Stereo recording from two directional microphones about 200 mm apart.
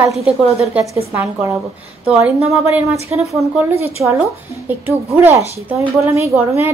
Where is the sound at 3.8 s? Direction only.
15° right (ahead or behind).